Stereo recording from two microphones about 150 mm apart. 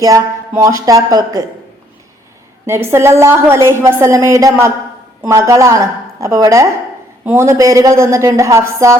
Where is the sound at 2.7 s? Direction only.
15° right (ahead or behind).